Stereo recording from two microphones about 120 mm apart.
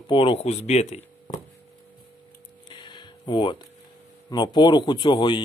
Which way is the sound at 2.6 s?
40° left (ahead or behind).